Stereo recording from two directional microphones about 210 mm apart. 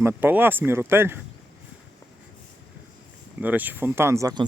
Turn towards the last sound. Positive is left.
turn(degrees=-15)  # may be behind; listen again after turning